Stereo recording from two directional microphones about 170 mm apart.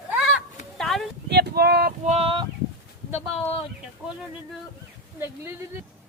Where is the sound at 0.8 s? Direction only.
Centre (ahead or behind).